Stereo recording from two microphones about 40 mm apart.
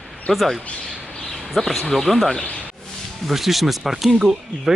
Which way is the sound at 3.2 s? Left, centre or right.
Centre.